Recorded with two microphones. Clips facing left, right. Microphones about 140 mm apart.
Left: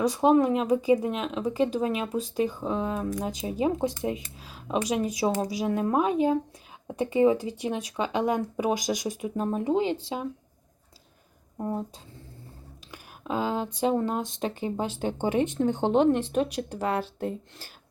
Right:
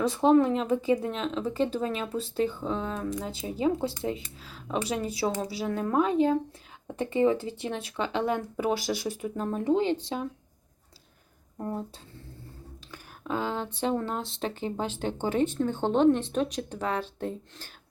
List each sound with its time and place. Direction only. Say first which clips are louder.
0.0 s speech: even; 15° left (ahead or behind)
11.5 s speech: left 3 dB; 15° left (ahead or behind)
12.9 s a sound: left 1 dB; 15° left (ahead or behind)
13.7 s speech: left 4 dB; 15° left (ahead or behind)